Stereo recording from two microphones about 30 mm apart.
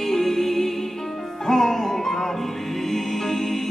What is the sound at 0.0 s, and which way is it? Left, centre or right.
Music, centre.